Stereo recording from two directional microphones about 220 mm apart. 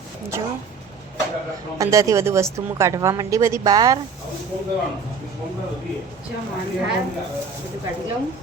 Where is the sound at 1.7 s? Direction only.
15° right (ahead or behind).